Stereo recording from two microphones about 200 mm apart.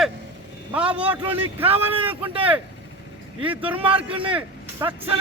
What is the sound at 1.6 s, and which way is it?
Speech, 30° right (ahead or behind).